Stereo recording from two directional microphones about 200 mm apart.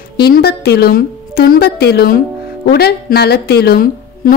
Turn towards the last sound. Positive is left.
turn(degrees=50)  # may be behind; listen again after turning